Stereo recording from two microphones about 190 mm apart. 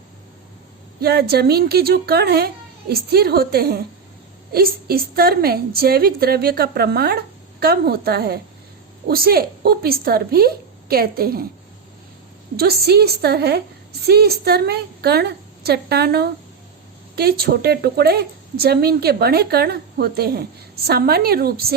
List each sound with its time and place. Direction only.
1.0 s a woman's voice: 55° right (ahead or behind)
12.5 s a woman's voice: 55° right (ahead or behind)